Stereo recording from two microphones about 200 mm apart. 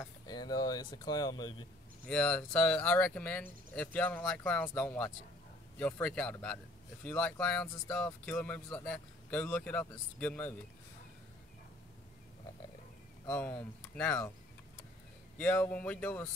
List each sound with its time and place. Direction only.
0.0 s speech: 20° left (ahead or behind)
2.0 s speech: 5° left (ahead or behind)
13.3 s speech: 5° left (ahead or behind)
15.3 s speech: 10° left (ahead or behind)